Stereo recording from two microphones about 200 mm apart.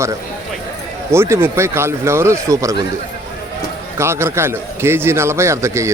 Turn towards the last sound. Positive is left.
turn(degrees=-15)  # may be behind; listen again after turning